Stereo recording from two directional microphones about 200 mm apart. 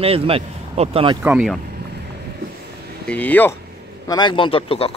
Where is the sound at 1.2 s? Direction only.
5° right (ahead or behind).